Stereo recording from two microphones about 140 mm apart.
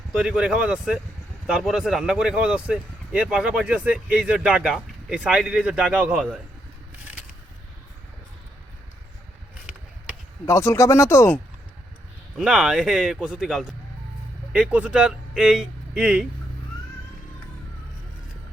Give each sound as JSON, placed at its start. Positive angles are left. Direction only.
{"t": 0.1, "sound": "speech", "side_deg": -5}
{"t": 10.4, "sound": "speech", "side_deg": 20}
{"t": 12.4, "sound": "speech", "side_deg": -5}